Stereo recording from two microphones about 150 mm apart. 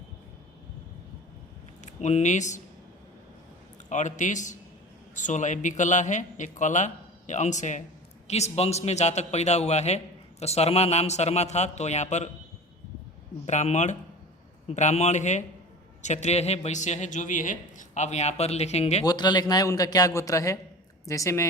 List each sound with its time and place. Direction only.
1.8 s speech: 50° left (ahead or behind)
3.8 s a man's voice: 55° left (ahead or behind)
13.4 s speech: 50° left (ahead or behind)
19.0 s a man's voice: 30° left (ahead or behind)